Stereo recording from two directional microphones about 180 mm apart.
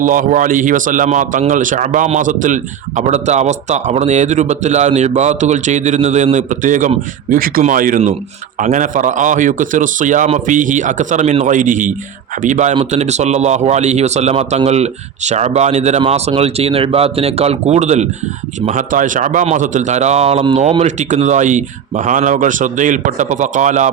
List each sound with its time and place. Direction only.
0.0 s a man's voice: 45° right (ahead or behind)